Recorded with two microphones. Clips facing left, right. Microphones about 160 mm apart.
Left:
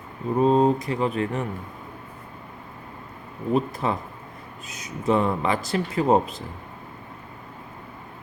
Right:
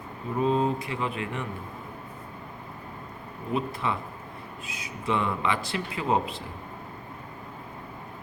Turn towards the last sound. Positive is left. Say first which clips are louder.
# left 6 dB
turn(degrees=40)  # may be behind; listen again after turning